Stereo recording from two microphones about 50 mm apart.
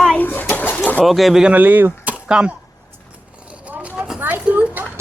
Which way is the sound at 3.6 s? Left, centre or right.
Right.